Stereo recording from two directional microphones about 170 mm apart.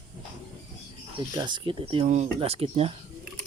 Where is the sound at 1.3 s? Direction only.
25° right (ahead or behind).